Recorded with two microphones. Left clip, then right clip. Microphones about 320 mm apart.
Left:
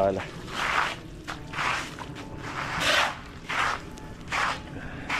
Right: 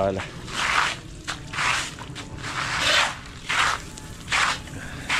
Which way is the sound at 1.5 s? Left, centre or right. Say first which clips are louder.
Right 4 dB; centre.